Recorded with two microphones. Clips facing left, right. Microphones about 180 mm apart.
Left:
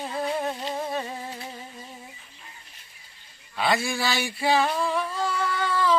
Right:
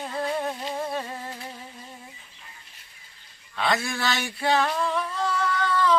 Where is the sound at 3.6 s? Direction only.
5° left (ahead or behind).